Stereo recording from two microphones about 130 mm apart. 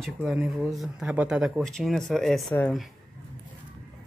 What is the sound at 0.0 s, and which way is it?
Speech, centre (ahead or behind).